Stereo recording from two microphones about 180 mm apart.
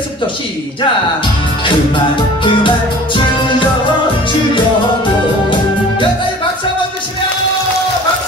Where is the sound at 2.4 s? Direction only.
25° left (ahead or behind).